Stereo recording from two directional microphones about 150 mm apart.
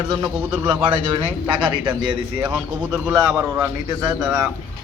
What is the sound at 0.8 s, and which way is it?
A man's voice, 35° right (ahead or behind).